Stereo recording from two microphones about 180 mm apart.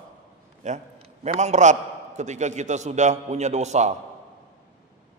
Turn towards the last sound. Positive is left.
turn(degrees=-40)  # may be behind; listen again after turning